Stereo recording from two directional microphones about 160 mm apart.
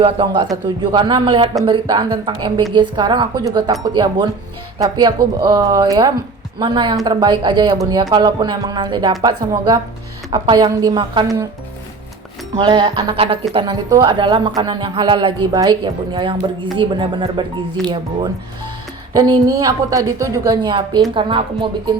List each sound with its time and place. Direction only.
0.0 s speech: 35° right (ahead or behind)
12.5 s speech: 30° right (ahead or behind)